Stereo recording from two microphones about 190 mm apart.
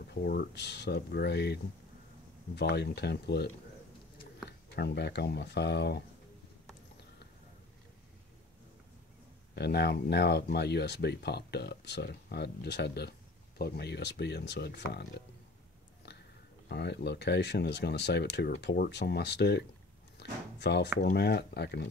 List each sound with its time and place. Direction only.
0.0 s speech: 55° left (ahead or behind)
4.5 s speech: 60° left (ahead or behind)
9.6 s speech: 60° left (ahead or behind)
16.6 s speech: 60° left (ahead or behind)
20.2 s a sound: 60° left (ahead or behind)
21.0 s speech: 55° left (ahead or behind)